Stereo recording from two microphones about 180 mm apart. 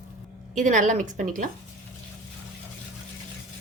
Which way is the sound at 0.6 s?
45° right (ahead or behind).